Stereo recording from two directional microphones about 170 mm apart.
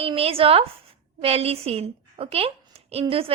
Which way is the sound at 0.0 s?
35° right (ahead or behind).